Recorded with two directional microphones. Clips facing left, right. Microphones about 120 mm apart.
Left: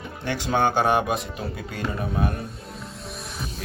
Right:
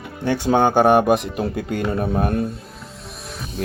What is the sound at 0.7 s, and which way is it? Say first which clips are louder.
Speech: right 8 dB; 55° right (ahead or behind).